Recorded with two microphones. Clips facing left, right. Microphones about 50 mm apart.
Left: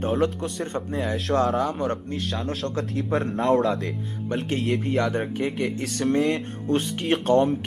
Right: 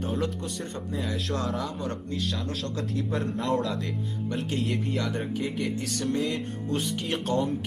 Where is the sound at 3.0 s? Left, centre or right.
Left.